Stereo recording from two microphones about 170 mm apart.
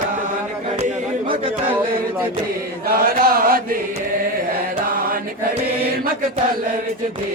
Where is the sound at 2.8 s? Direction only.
60° right (ahead or behind).